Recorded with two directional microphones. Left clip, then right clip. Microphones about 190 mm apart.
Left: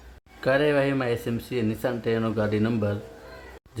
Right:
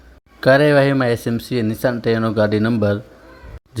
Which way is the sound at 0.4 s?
35° right (ahead or behind).